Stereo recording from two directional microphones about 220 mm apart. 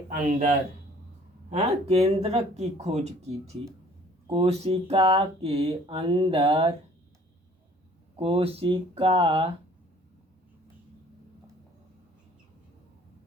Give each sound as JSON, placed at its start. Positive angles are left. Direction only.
{"t": 0.1, "sound": "speech", "side_deg": -40}
{"t": 1.5, "sound": "speech", "side_deg": -30}
{"t": 8.1, "sound": "speech", "side_deg": -25}